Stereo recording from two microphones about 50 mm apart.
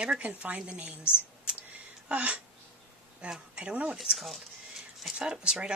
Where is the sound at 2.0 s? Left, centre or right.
Right.